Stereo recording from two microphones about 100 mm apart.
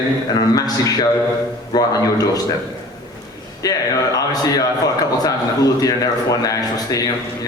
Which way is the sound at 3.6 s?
40° left (ahead or behind).